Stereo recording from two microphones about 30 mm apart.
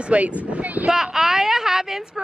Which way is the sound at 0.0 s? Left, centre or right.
Right.